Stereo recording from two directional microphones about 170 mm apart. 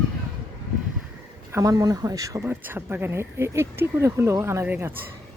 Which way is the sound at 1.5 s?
20° right (ahead or behind).